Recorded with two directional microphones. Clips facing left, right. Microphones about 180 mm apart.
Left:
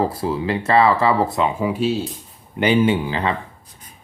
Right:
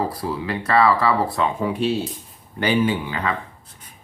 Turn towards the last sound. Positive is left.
turn(degrees=30)  # may be behind; listen again after turning